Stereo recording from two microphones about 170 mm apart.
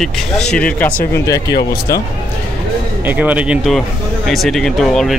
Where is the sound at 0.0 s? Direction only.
5° left (ahead or behind).